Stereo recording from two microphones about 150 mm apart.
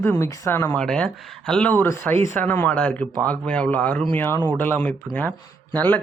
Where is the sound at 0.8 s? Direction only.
5° left (ahead or behind).